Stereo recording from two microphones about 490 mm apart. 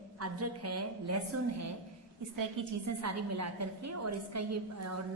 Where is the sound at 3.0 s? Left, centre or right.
Right.